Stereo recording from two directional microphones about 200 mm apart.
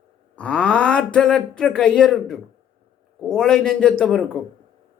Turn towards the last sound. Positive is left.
turn(degrees=5)  # may be behind; listen again after turning